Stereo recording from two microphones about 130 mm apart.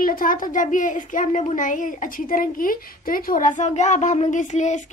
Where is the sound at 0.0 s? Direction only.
90° left.